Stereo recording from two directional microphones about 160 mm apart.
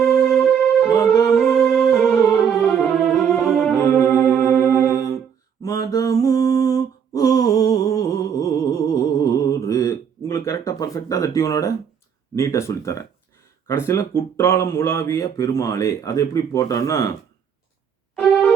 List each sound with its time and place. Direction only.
0.2 s music: 5° left (ahead or behind)
1.1 s music: 20° left (ahead or behind)
1.4 s music: centre (ahead or behind)
2.9 s music: centre (ahead or behind)
3.8 s music: 20° left (ahead or behind)
5.6 s mantra: 20° left (ahead or behind)
12.4 s a man's voice: 20° left (ahead or behind)
18.2 s music: 5° left (ahead or behind)